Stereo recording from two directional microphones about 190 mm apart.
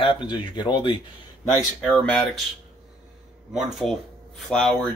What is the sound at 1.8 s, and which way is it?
Speech, 5° left (ahead or behind).